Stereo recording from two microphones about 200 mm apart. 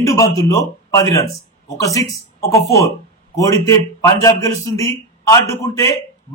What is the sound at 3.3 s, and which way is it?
A man's voice, 15° left (ahead or behind).